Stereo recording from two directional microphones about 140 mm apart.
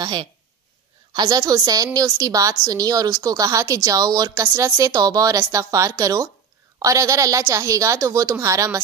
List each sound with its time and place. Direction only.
0.0 s a woman's voice: 35° right (ahead or behind)